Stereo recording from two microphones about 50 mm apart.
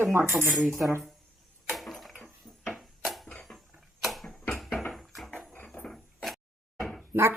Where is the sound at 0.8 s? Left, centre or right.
Right.